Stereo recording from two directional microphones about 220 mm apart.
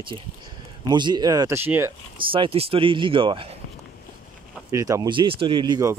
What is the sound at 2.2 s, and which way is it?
Speech, 25° right (ahead or behind).